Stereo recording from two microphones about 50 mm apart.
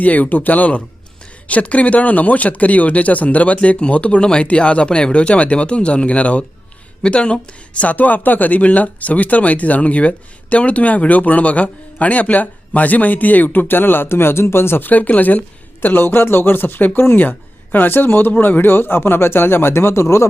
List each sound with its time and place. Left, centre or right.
0.0 s speech: left
7.8 s speech: left
14.8 s a woman's voice: left